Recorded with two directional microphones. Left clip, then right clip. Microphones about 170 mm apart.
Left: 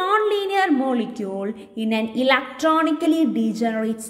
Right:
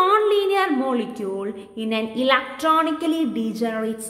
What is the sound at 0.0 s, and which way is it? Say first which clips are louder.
A woman's voice: right 2 dB; 15° left (ahead or behind).